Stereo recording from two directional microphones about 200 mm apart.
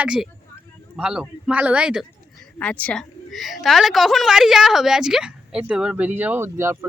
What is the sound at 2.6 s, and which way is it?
A woman's voice, 5° left (ahead or behind).